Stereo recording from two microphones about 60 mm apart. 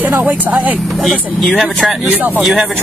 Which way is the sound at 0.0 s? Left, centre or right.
Right.